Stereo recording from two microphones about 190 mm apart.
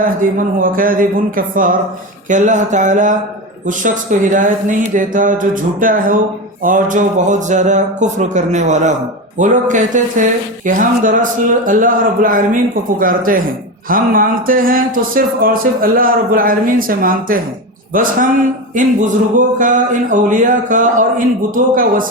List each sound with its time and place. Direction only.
0.0 s speech: 45° right (ahead or behind)